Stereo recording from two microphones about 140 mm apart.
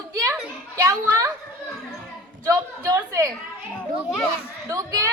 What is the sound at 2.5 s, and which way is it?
Child singing, 25° right (ahead or behind).